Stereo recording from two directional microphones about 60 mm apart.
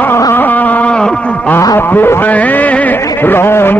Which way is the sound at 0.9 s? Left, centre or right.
Centre.